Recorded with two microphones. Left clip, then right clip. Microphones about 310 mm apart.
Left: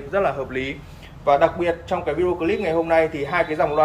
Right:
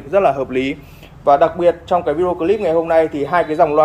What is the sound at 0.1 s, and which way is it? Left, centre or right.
A man's voice, right.